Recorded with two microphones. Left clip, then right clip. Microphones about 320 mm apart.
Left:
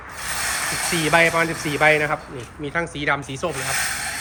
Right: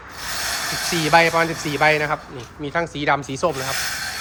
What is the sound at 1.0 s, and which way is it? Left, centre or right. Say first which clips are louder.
Speech: right 2 dB; centre.